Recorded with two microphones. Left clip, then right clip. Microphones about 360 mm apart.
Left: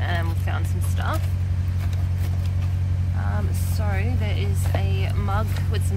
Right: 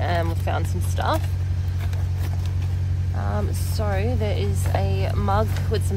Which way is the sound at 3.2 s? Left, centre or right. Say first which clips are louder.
Right 4 dB; right.